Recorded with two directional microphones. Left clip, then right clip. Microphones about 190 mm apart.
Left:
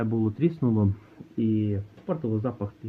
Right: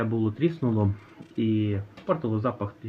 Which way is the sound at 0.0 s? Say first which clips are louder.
Even; 45° left (ahead or behind).